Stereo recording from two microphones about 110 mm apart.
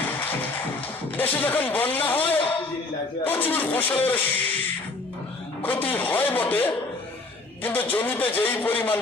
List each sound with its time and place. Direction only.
0.0 s music: 15° left (ahead or behind)
1.1 s speech: 15° left (ahead or behind)
5.6 s speech: 15° left (ahead or behind)